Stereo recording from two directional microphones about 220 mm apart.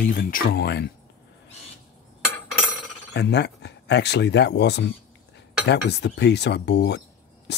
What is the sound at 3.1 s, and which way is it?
Speech, 50° left (ahead or behind).